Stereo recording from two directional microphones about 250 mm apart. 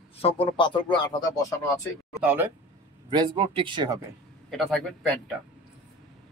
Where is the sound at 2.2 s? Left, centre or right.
Centre.